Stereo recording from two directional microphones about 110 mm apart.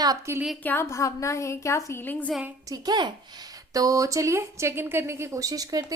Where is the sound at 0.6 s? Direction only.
20° left (ahead or behind).